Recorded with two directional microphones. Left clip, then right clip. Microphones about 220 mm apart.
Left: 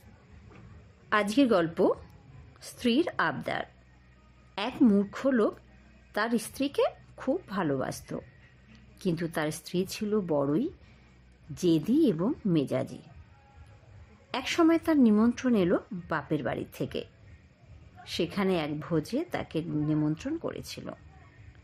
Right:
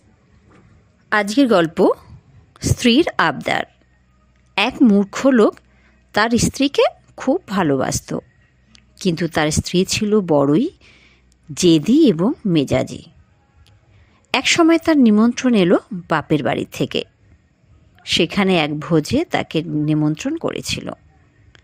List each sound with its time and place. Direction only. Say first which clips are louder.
1.1 s speech: right 10 dB; 20° right (ahead or behind)
14.3 s speech: right 11 dB; 30° right (ahead or behind)